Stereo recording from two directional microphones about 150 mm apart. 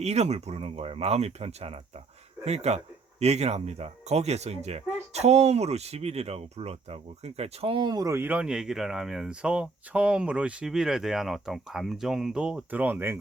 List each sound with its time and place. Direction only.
0.0 s speech: 45° right (ahead or behind); by 13.1 s 15° right (ahead or behind)